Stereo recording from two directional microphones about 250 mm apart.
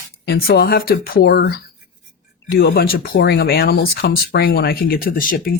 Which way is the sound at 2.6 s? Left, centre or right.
Left.